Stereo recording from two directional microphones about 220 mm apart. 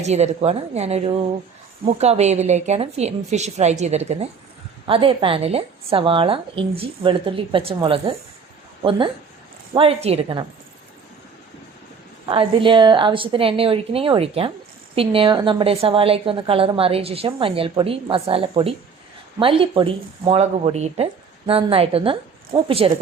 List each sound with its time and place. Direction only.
0.0 s a woman's voice: 30° right (ahead or behind)
12.3 s a woman's voice: 25° right (ahead or behind)